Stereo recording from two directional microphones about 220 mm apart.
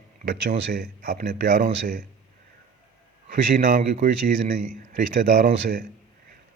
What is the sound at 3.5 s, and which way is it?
Speech, 40° right (ahead or behind).